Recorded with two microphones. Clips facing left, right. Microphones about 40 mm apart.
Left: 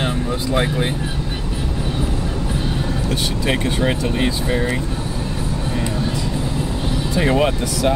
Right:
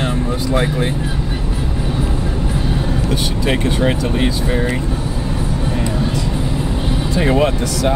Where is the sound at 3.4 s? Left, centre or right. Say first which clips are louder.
Right 3 dB; centre.